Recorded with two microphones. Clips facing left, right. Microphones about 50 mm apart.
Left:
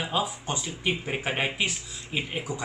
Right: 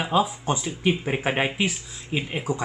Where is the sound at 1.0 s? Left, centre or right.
Right.